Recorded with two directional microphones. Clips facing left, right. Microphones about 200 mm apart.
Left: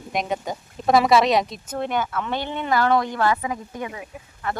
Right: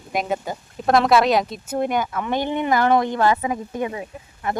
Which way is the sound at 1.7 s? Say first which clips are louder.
Right 3 dB; 10° right (ahead or behind).